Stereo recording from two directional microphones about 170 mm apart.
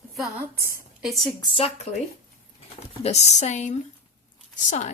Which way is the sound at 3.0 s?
40° left (ahead or behind).